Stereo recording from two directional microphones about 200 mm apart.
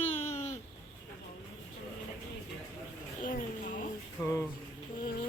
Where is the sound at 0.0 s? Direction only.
35° left (ahead or behind).